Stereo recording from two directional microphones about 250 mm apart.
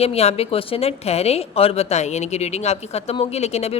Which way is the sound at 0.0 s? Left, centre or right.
Left.